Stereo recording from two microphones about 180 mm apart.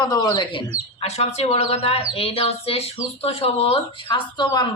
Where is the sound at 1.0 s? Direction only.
35° left (ahead or behind).